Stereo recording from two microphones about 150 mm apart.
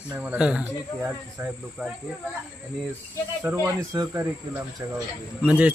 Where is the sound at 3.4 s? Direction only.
15° right (ahead or behind).